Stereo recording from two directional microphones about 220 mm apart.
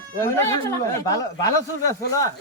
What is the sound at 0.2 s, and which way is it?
Speech, 10° left (ahead or behind).